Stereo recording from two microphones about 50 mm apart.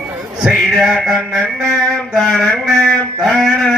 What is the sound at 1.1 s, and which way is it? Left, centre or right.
Speech, centre.